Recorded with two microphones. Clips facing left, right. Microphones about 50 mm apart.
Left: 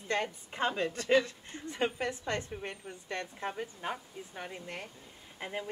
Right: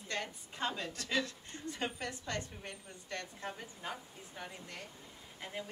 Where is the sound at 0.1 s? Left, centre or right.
Left.